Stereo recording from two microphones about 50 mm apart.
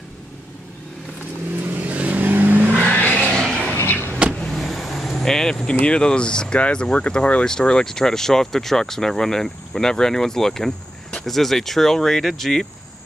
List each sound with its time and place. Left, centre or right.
1.7 s vehicle: right
2.9 s a sound: left
3.3 s vehicle: centre
5.8 s speech: centre